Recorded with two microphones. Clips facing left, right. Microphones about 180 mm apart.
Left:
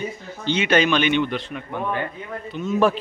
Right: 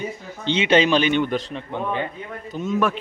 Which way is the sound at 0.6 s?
25° right (ahead or behind).